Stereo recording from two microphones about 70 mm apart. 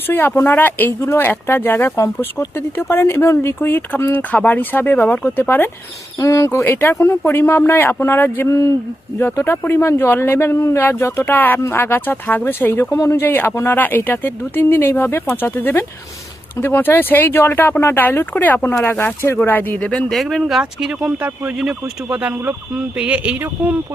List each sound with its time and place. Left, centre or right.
0.1 s speech: left
6.1 s speech: left
8.4 s speech: left
9.4 s speech: left
11.3 s speech: left
12.8 s speech: left
13.2 s speech: left
20.3 s speech: centre
20.6 s speech: centre
21.2 s speech: right
21.6 s speech: centre
22.2 s speech: right